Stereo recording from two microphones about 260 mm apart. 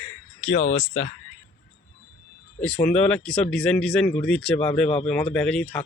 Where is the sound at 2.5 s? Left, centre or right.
Centre.